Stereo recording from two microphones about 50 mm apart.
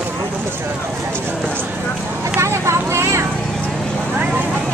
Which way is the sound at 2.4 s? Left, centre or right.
Right.